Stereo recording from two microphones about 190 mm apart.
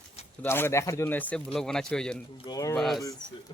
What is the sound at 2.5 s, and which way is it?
Speech, 20° left (ahead or behind).